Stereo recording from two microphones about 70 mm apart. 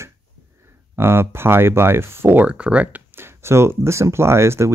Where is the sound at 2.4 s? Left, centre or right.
Centre.